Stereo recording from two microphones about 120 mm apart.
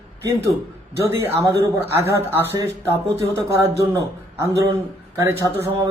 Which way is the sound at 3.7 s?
25° right (ahead or behind).